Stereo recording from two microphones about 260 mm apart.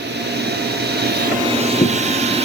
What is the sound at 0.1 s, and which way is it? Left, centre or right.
Vehicle, right.